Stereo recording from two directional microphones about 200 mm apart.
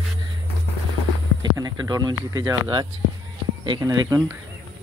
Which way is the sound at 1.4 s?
20° right (ahead or behind).